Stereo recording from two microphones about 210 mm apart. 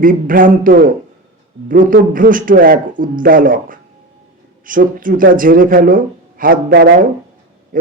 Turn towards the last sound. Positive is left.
turn(degrees=-45)  # may be behind; listen again after turning